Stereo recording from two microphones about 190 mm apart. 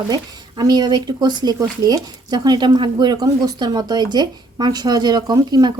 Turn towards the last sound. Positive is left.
turn(degrees=-20)  # may be behind; listen again after turning